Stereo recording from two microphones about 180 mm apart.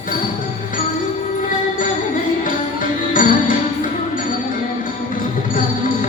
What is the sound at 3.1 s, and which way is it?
Music, 50° left (ahead or behind).